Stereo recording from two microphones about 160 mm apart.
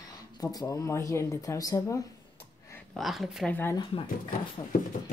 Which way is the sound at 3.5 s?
15° left (ahead or behind).